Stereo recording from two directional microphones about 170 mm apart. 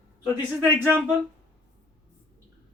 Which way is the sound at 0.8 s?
10° right (ahead or behind).